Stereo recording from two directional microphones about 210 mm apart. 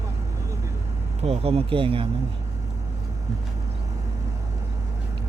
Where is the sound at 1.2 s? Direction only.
30° right (ahead or behind).